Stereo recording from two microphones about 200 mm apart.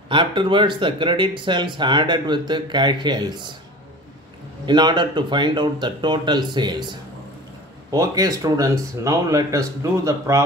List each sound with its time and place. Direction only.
0.1 s speech: 25° right (ahead or behind)
4.6 s speech: 20° right (ahead or behind)